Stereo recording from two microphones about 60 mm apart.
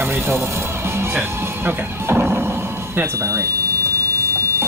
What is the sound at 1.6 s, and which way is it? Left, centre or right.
Speech, right.